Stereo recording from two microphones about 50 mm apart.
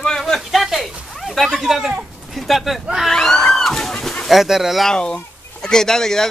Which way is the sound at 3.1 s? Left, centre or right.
Centre.